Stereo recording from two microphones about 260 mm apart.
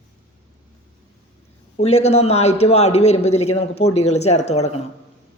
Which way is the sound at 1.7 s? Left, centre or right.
Left.